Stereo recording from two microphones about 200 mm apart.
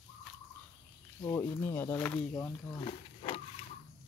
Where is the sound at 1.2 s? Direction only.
10° left (ahead or behind).